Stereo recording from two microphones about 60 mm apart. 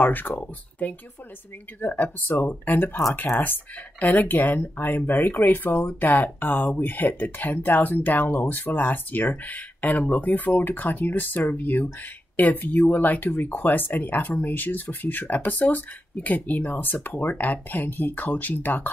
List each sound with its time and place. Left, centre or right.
0.0 s speech: left
1.8 s speech: left